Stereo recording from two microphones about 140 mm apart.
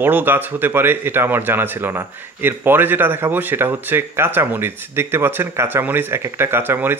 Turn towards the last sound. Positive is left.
turn(degrees=-15)  # may be behind; listen again after turning